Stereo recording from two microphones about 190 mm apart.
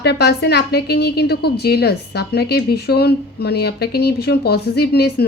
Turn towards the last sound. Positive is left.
turn(degrees=60)  # may be behind; listen again after turning